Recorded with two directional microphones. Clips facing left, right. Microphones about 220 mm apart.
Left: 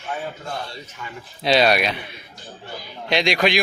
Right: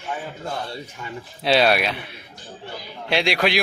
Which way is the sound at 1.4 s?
5° right (ahead or behind).